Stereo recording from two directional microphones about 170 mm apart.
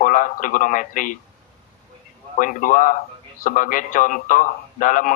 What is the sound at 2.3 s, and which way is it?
Speech, 50° left (ahead or behind).